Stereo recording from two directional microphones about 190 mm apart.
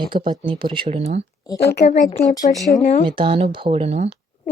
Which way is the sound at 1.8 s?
40° left (ahead or behind).